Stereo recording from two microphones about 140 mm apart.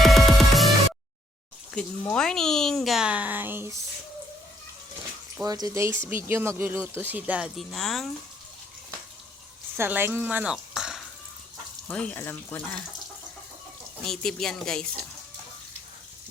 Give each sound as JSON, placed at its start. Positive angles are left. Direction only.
{"t": 0.0, "sound": "music", "side_deg": 0}
{"t": 1.7, "sound": "speech", "side_deg": 5}
{"t": 5.4, "sound": "speech", "side_deg": -25}
{"t": 9.7, "sound": "speech", "side_deg": -15}
{"t": 11.9, "sound": "speech", "side_deg": 10}
{"t": 14.0, "sound": "speech", "side_deg": 5}